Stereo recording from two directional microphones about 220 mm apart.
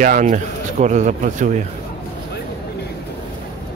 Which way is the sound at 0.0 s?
35° right (ahead or behind).